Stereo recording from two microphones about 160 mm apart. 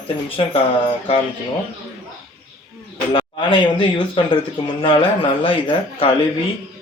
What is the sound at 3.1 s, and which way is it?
Speech, 30° left (ahead or behind).